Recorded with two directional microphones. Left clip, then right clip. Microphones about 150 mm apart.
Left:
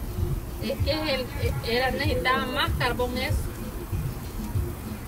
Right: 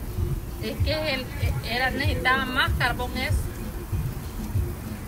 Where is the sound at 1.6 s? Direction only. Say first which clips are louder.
Even; 90° left.